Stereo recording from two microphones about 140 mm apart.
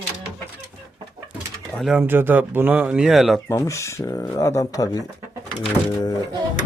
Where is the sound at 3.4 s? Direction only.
20° left (ahead or behind).